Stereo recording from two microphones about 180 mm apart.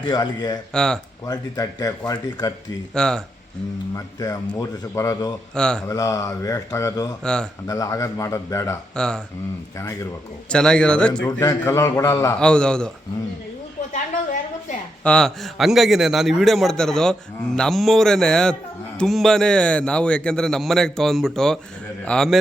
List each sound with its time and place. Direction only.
0.0 s speech: 25° left (ahead or behind)
0.7 s a man's voice: 5° left (ahead or behind)
1.2 s speech: 20° left (ahead or behind)
2.9 s a man's voice: 5° left (ahead or behind)
3.9 s speech: 20° left (ahead or behind)
5.5 s a man's voice: 5° left (ahead or behind)
5.9 s speech: 20° left (ahead or behind)
7.2 s a man's voice: 5° left (ahead or behind)
7.7 s a man's voice: 20° left (ahead or behind)
9.0 s a man's voice: 5° left (ahead or behind)
10.5 s a man's voice: 5° left (ahead or behind)
11.3 s a man's voice: 20° left (ahead or behind)
15.0 s a man's voice: 5° left (ahead or behind)